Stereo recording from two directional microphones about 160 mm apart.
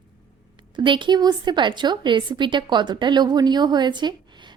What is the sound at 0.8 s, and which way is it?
Speech, 30° right (ahead or behind).